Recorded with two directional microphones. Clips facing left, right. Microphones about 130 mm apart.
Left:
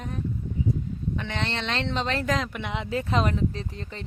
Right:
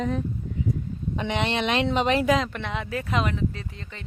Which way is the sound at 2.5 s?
15° left (ahead or behind).